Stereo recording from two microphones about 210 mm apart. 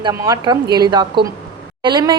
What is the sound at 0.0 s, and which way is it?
A woman's voice, 15° right (ahead or behind).